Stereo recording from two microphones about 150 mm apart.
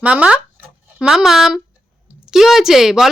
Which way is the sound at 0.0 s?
10° right (ahead or behind).